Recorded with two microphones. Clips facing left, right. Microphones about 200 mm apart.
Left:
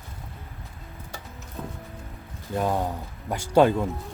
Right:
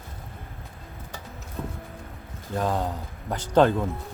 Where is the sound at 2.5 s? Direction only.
10° left (ahead or behind).